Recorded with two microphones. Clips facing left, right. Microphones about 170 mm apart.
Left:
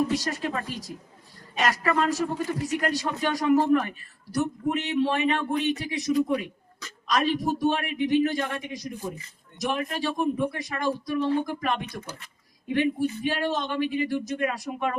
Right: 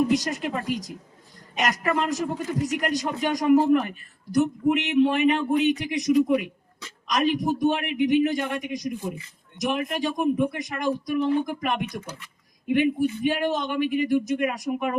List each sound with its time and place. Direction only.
0.1 s speech: 20° right (ahead or behind)
5.4 s speech: 15° right (ahead or behind)